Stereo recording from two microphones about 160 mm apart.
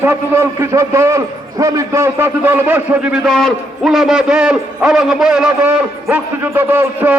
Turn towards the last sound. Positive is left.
turn(degrees=-10)  # may be behind; listen again after turning